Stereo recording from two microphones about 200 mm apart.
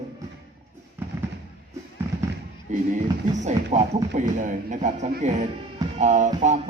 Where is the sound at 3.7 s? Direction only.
35° right (ahead or behind).